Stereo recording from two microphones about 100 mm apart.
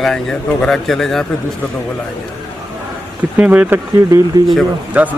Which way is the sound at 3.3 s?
15° right (ahead or behind).